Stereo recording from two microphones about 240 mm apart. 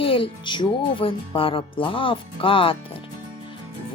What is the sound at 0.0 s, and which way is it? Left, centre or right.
Speech, left.